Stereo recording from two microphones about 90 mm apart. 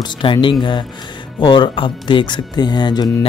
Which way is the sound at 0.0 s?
65° left (ahead or behind).